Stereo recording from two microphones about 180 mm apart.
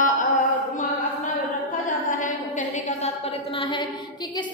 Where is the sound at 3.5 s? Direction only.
30° left (ahead or behind).